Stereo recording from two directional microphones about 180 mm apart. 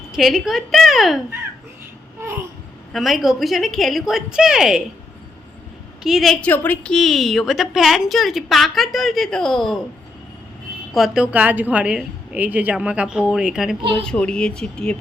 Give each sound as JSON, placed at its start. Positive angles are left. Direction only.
{"t": 0.1, "sound": "a woman's voice", "side_deg": 0}
{"t": 2.2, "sound": "babbling", "side_deg": -15}
{"t": 2.9, "sound": "a woman's voice", "side_deg": 0}
{"t": 6.0, "sound": "a woman's voice", "side_deg": 0}
{"t": 10.9, "sound": "a woman's voice", "side_deg": -5}